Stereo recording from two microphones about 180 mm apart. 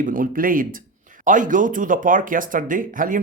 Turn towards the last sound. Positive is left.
turn(degrees=-50)  # may be behind; listen again after turning